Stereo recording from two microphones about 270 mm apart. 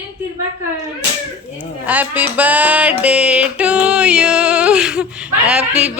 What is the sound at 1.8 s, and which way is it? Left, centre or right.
Music, centre.